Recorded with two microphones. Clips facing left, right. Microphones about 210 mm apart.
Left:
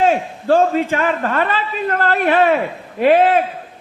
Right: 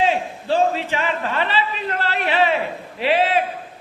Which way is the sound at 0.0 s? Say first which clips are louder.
Left 4 dB; 50° left (ahead or behind).